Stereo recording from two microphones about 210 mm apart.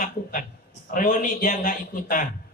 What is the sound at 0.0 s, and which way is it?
A man's voice, 40° left (ahead or behind).